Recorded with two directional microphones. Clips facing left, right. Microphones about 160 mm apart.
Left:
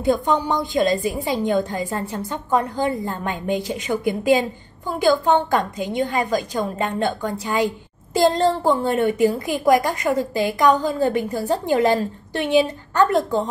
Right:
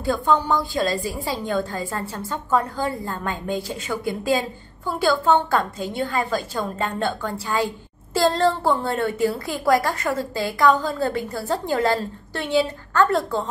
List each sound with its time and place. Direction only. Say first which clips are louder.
0.0 s a woman's voice: left 2 dB; 20° left (ahead or behind)